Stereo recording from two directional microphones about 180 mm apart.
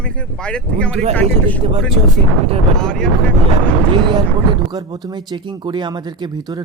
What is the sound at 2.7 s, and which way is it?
Speech, 5° left (ahead or behind).